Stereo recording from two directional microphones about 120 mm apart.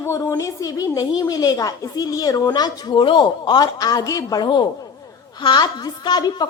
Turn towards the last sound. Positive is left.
turn(degrees=35)  # may be behind; listen again after turning